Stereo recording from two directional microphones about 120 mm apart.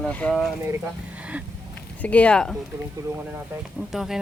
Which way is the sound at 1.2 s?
10° right (ahead or behind).